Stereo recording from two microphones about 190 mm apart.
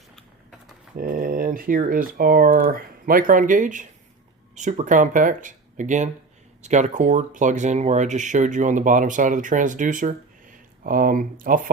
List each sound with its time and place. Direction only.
0.9 s speech: 50° right (ahead or behind)